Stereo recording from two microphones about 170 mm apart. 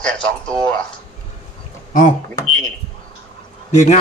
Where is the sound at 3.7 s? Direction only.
45° left (ahead or behind).